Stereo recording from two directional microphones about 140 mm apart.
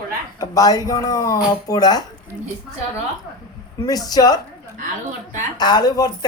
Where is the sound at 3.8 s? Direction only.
25° left (ahead or behind).